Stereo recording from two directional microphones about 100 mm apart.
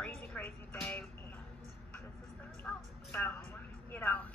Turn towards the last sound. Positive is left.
turn(degrees=20)  # may be behind; listen again after turning